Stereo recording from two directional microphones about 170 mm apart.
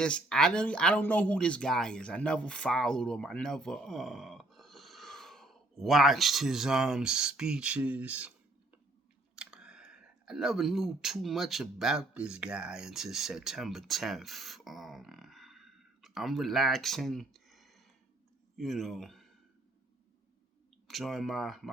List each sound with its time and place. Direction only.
0.0 s speech: 5° left (ahead or behind)
9.3 s speech: 5° right (ahead or behind)
20.8 s speech: centre (ahead or behind)